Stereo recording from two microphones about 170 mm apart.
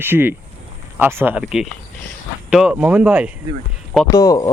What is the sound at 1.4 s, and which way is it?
Speech, centre (ahead or behind).